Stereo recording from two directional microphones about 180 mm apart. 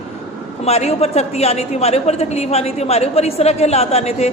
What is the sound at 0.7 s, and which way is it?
A woman's voice, 35° left (ahead or behind).